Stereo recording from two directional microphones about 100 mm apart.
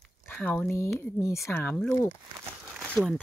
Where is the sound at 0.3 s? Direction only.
15° left (ahead or behind).